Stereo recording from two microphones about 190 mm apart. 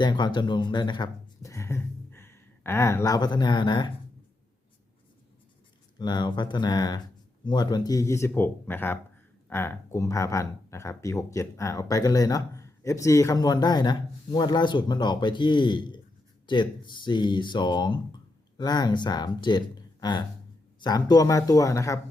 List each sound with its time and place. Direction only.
0.0 s speech: 25° left (ahead or behind)
6.0 s speech: 25° left (ahead or behind)